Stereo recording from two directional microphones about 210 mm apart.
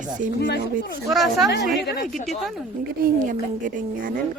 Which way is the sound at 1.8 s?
50° left (ahead or behind).